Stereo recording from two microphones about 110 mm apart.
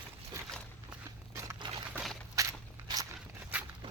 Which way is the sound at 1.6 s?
45° right (ahead or behind).